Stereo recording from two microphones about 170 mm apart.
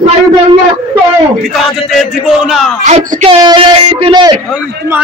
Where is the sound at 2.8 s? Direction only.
35° right (ahead or behind).